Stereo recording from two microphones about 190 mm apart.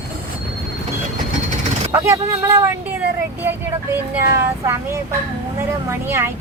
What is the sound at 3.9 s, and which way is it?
Speech, 15° right (ahead or behind).